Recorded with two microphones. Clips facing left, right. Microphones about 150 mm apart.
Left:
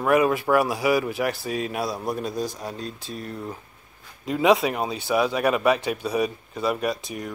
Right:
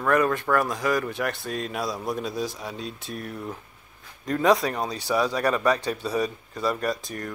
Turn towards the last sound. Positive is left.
turn(degrees=0)  # may be behind; listen again after turning